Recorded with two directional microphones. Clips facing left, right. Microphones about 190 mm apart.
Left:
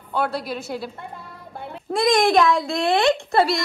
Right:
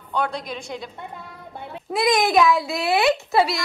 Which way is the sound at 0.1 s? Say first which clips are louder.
Left 2 dB; 5° left (ahead or behind).